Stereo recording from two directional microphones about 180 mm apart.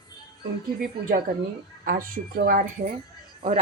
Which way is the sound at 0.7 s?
50° right (ahead or behind).